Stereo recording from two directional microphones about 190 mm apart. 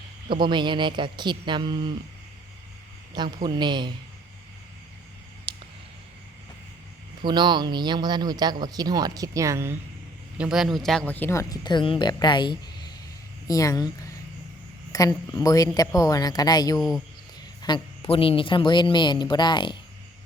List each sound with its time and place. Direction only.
0.3 s speech: 25° right (ahead or behind)
3.4 s speech: 25° right (ahead or behind)
5.5 s a sound: 25° right (ahead or behind)
7.3 s speech: 25° right (ahead or behind)
10.3 s speech: 5° right (ahead or behind); by 19.7 s 25° left (ahead or behind)